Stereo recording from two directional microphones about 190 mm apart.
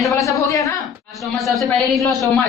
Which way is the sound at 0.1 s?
15° left (ahead or behind).